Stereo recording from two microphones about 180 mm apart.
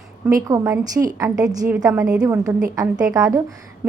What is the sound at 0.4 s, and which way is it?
A woman's voice, 15° right (ahead or behind).